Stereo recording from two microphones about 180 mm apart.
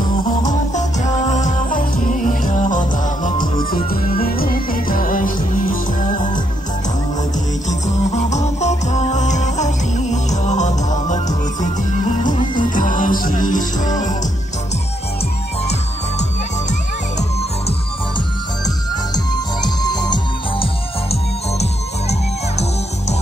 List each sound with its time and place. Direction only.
0.5 s music: 40° left (ahead or behind)
3.3 s music: 25° left (ahead or behind)
3.9 s music: 55° left (ahead or behind)
7.8 s music: 40° left (ahead or behind)
17.2 s music: 35° left (ahead or behind)
19.1 s music: 25° left (ahead or behind)